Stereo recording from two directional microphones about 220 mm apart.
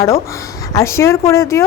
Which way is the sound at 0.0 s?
15° left (ahead or behind).